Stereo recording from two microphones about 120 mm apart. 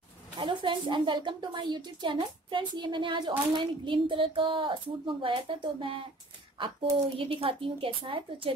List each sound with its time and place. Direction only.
0.4 s a woman's voice: 45° right (ahead or behind)